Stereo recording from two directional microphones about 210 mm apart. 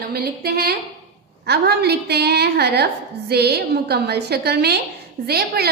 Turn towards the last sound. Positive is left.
turn(degrees=-50)  # may be behind; listen again after turning